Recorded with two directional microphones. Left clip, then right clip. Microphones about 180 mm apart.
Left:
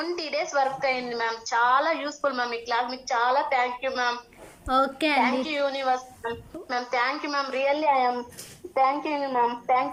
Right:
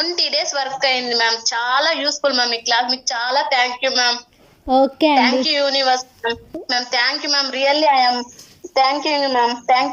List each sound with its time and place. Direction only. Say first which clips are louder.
0.0 s a woman's voice: right 9 dB; 30° right (ahead or behind)
4.7 s a woman's voice: right 9 dB; 20° right (ahead or behind)
5.2 s a woman's voice: right 8 dB; 35° right (ahead or behind)